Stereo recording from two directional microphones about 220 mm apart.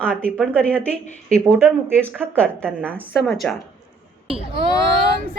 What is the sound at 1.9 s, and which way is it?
A woman's voice, 5° left (ahead or behind).